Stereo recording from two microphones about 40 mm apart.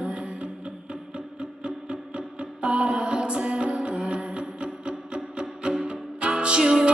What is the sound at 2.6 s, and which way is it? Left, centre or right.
Music, right.